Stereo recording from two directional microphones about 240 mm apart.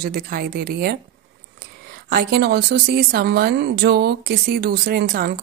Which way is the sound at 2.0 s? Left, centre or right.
Right.